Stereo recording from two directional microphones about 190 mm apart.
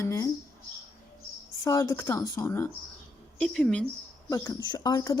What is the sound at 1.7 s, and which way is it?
Speech, 15° left (ahead or behind).